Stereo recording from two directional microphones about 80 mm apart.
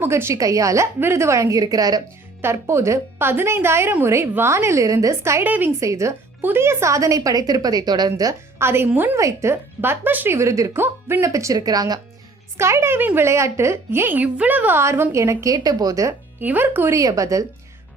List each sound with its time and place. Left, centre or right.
0.0 s a woman's voice: right
0.9 s a woman's voice: right
2.4 s a woman's voice: right
5.4 s a woman's voice: right
5.8 s a woman's voice: right
6.4 s a woman's voice: right
8.5 s a woman's voice: right
10.3 s a woman's voice: right
12.5 s a woman's voice: right
14.8 s a woman's voice: right
16.4 s a woman's voice: right
17.0 s a woman's voice: right